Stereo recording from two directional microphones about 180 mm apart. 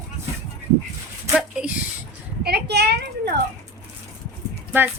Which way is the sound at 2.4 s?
65° right (ahead or behind).